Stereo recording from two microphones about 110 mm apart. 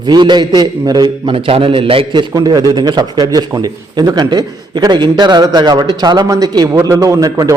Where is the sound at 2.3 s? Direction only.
35° right (ahead or behind).